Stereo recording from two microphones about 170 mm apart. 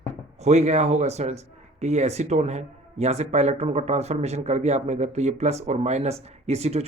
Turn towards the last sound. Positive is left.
turn(degrees=-40)  # may be behind; listen again after turning